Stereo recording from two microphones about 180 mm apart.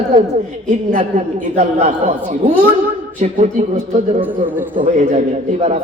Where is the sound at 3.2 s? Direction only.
45° right (ahead or behind).